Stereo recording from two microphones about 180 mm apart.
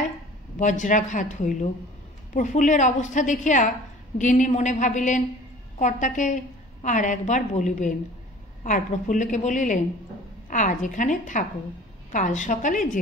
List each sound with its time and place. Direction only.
0.6 s a woman's voice: 45° left (ahead or behind)